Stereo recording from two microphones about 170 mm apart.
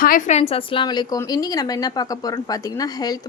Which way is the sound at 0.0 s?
50° left (ahead or behind).